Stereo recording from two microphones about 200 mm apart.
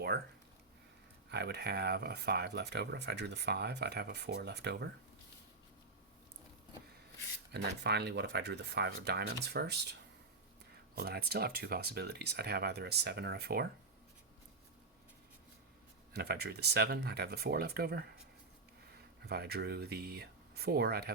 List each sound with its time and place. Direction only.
1.3 s speech: 55° right (ahead or behind)
7.5 s speech: 55° right (ahead or behind)
16.1 s speech: 50° right (ahead or behind)
19.2 s speech: 55° right (ahead or behind)